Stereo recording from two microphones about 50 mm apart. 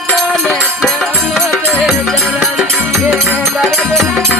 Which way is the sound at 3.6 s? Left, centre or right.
Centre.